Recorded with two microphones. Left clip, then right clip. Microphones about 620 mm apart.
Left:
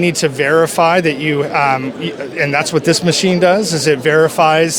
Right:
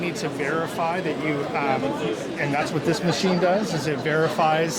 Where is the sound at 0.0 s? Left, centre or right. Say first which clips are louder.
Left 12 dB; left.